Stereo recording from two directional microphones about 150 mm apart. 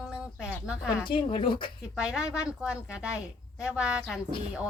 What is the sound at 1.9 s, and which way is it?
Speech, 5° right (ahead or behind).